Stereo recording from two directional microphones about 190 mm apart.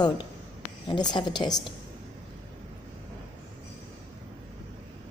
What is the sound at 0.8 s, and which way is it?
Speech, 25° left (ahead or behind).